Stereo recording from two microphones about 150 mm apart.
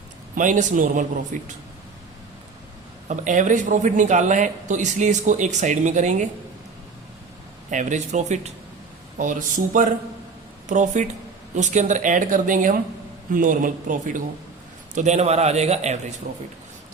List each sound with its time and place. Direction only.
0.3 s speech: 60° right (ahead or behind)
3.1 s speech: 55° right (ahead or behind)
7.7 s speech: 55° right (ahead or behind)
14.9 s speech: 50° right (ahead or behind)